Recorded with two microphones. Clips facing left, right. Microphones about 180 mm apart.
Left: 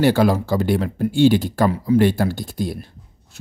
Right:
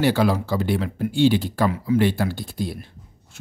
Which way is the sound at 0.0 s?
45° left (ahead or behind).